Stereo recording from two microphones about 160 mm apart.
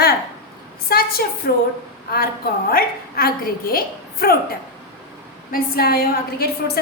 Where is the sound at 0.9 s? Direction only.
70° left (ahead or behind).